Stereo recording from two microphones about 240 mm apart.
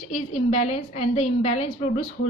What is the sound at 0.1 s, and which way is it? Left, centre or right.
A woman's voice, left.